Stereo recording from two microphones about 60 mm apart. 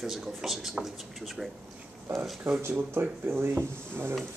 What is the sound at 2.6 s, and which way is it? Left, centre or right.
Speech, right.